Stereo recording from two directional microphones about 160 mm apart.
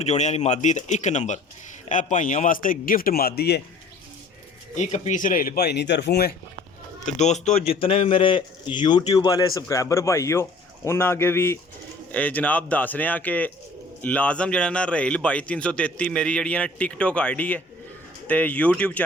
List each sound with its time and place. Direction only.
0.0 s a man's voice: 45° left (ahead or behind); by 3.6 s 85° left
4.8 s speech: 45° left (ahead or behind); by 6.3 s 85° left
7.0 s a man's voice: 45° left (ahead or behind)
7.7 s a man's voice: 35° left (ahead or behind); by 19.0 s 10° left (ahead or behind)